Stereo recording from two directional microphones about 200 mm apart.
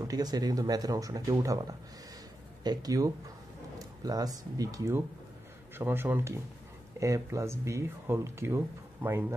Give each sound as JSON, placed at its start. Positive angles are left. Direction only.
{"t": 0.0, "sound": "speech", "side_deg": -20}